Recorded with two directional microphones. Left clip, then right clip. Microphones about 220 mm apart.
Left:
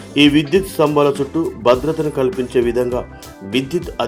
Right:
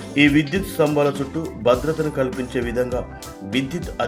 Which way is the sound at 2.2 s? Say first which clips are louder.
Left 6 dB; 20° left (ahead or behind).